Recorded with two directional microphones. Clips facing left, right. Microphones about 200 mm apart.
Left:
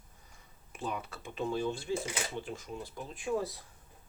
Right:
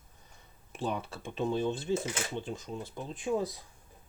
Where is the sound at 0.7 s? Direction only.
30° right (ahead or behind).